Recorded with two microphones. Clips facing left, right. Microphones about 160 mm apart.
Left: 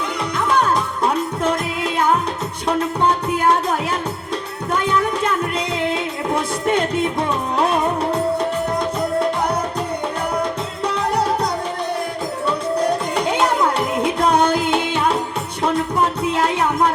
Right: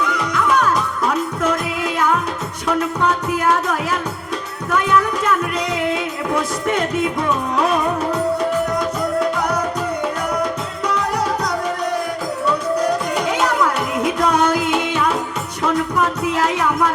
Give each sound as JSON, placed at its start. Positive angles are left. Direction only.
{"t": 0.0, "sound": "music", "side_deg": 30}
{"t": 10.8, "sound": "music", "side_deg": 30}
{"t": 12.8, "sound": "music", "side_deg": 30}